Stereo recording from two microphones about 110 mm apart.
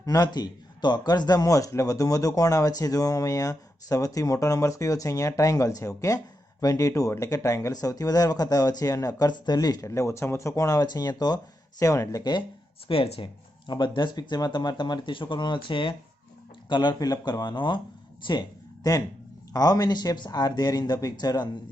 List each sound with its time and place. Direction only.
0.0 s speech: 35° left (ahead or behind)
12.9 s speech: 60° left (ahead or behind)
13.7 s speech: 45° left (ahead or behind)